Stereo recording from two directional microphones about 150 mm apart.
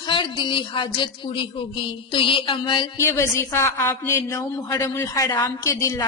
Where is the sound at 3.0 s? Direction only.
20° left (ahead or behind).